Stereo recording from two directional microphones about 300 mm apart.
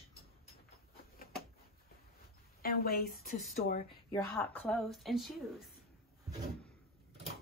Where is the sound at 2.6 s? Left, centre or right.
Left.